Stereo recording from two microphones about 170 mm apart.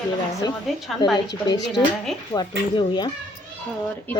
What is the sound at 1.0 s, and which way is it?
Speech, 25° left (ahead or behind).